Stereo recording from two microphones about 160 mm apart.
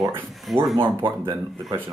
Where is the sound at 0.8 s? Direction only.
15° right (ahead or behind).